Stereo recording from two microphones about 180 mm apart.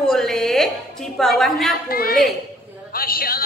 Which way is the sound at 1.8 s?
55° left (ahead or behind).